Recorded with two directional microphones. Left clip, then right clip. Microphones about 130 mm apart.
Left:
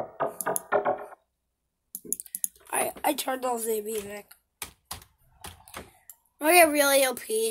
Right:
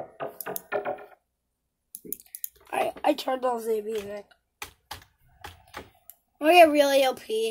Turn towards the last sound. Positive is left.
turn(degrees=0)  # may be behind; listen again after turning